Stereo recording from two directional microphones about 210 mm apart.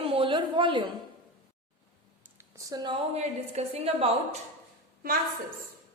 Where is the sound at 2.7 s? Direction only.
20° right (ahead or behind).